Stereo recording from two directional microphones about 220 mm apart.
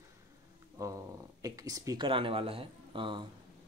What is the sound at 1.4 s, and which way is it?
Speech, 15° right (ahead or behind).